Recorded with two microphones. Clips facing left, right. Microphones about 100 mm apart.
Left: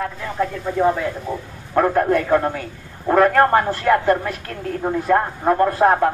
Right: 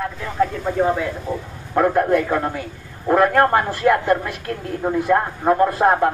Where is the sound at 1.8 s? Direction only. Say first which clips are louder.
Even; 5° right (ahead or behind).